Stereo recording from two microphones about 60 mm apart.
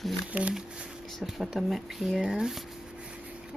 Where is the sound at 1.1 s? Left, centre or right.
Centre.